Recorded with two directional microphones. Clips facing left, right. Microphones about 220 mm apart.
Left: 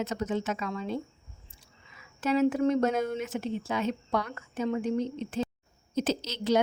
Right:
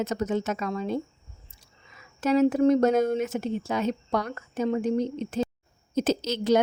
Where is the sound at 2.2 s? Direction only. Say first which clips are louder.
Right 4 dB; 40° right (ahead or behind).